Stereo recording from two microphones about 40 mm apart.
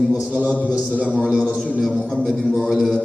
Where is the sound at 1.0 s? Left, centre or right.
Left.